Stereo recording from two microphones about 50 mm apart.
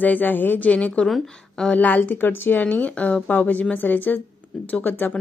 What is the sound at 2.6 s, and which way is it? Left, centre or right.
Speech, left.